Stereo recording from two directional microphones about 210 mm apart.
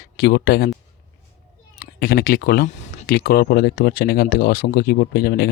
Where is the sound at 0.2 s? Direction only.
50° left (ahead or behind).